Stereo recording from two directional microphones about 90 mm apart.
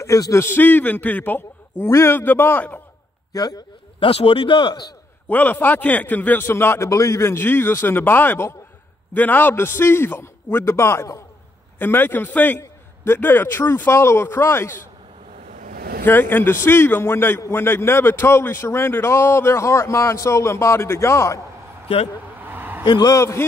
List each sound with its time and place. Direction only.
0.0 s a man's voice: 35° left (ahead or behind)
3.3 s a man's voice: 45° left (ahead or behind)
4.0 s a man's voice: 85° left; by 4.8 s 60° left (ahead or behind)
5.3 s a man's voice: 20° left (ahead or behind)
16.1 s a man's voice: 20° left (ahead or behind)
22.4 s a sound: 20° right (ahead or behind)
22.8 s a man's voice: 55° left (ahead or behind)
23.1 s a man's voice: 30° left (ahead or behind)